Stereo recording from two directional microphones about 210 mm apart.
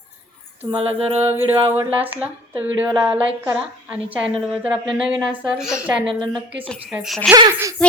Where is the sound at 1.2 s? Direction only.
10° right (ahead or behind).